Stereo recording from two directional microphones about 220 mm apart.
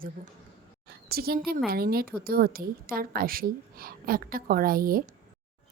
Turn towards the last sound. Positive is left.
turn(degrees=-40)  # may be behind; listen again after turning